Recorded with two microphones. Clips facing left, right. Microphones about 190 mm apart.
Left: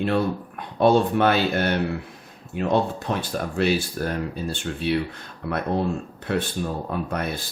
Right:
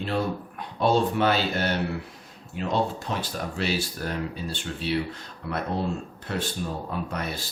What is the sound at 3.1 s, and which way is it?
Speech, 50° left (ahead or behind).